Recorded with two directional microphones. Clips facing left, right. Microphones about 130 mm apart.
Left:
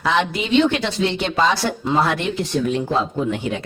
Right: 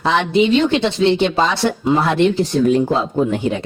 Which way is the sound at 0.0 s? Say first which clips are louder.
Right 5 dB; 25° right (ahead or behind).